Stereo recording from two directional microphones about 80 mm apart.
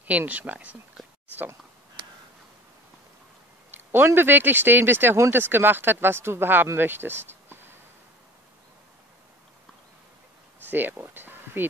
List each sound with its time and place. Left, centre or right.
0.0 s speech: centre
3.7 s speech: right
10.7 s speech: right